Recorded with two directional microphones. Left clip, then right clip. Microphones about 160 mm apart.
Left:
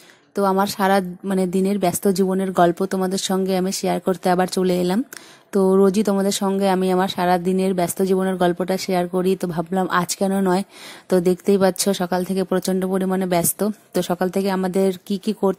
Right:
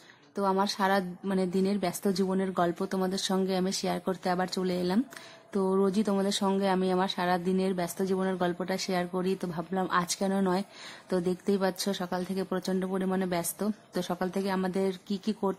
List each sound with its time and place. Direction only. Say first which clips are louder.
0.4 s speech: left 9 dB; 35° left (ahead or behind)